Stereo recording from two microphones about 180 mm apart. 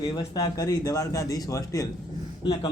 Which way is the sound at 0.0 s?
20° left (ahead or behind).